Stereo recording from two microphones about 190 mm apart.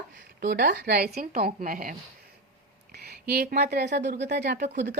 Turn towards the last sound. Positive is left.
turn(degrees=-60)  # may be behind; listen again after turning